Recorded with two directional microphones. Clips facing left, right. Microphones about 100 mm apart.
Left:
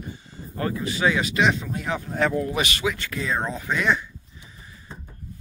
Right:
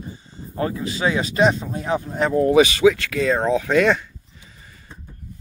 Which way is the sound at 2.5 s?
90° right.